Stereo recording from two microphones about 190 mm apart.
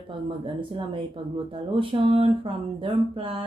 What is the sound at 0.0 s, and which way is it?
Speech, 25° right (ahead or behind).